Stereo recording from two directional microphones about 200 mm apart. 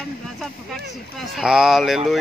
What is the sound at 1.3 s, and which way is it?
Speech, 5° right (ahead or behind).